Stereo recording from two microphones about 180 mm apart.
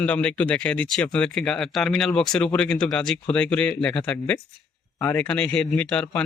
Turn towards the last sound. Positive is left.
turn(degrees=5)  # may be behind; listen again after turning